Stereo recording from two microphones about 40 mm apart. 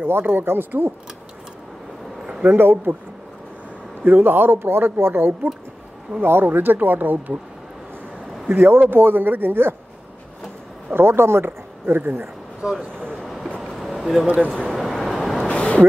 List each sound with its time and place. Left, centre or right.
0.2 s speech: right
2.5 s speech: right
4.0 s speech: right
8.5 s speech: right
11.0 s speech: right
12.9 s vehicle: centre
13.6 s a sound: centre
14.2 s speech: right
14.8 s vehicle: centre
15.4 s a sound: left